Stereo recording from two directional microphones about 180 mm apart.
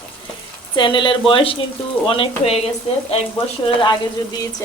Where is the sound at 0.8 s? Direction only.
25° left (ahead or behind).